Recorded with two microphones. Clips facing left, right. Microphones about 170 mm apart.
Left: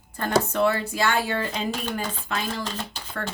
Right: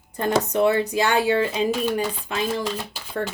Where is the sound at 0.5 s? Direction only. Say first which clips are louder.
Right 4 dB; 20° right (ahead or behind).